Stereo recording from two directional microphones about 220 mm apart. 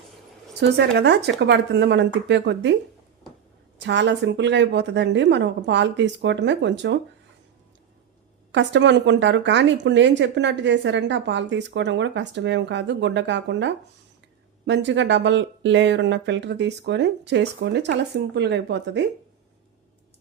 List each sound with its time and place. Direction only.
0.6 s a woman's voice: 50° right (ahead or behind)
3.8 s a woman's voice: 55° right (ahead or behind)
8.5 s a woman's voice: 55° right (ahead or behind)